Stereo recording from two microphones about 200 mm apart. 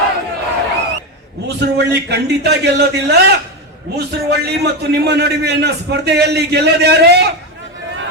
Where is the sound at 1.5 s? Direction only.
55° right (ahead or behind).